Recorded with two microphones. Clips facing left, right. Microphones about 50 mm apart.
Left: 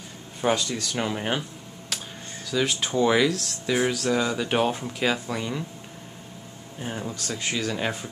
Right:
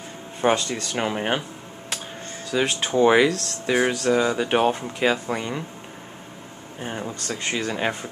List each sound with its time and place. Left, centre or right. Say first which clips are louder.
0.4 s speech: right 3 dB; right
2.6 s speech: right 4 dB; centre
3.9 s speech: right 4 dB; centre
6.8 s speech: right 2 dB; centre
7.1 s speech: right 2 dB; right